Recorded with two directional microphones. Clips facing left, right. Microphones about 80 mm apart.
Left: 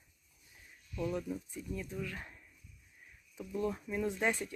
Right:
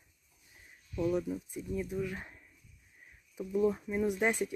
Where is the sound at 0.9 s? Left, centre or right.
Centre.